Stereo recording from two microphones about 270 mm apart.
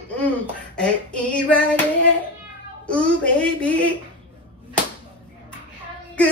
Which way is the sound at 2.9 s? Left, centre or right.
Centre.